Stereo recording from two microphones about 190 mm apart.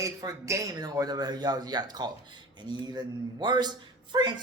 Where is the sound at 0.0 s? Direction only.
15° right (ahead or behind).